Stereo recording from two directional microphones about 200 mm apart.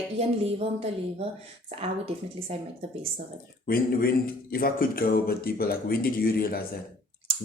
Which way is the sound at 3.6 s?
45° left (ahead or behind).